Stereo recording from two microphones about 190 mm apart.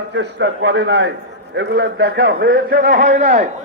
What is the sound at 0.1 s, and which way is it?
A man's voice, 70° right (ahead or behind).